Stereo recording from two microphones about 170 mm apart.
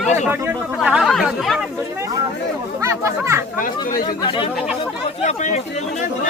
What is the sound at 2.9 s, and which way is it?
Speech, 15° right (ahead or behind).